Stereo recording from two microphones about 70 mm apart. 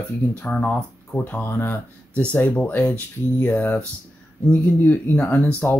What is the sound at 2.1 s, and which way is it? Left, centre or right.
Speech, left.